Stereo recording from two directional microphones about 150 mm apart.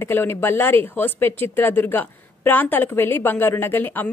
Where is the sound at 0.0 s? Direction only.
15° left (ahead or behind).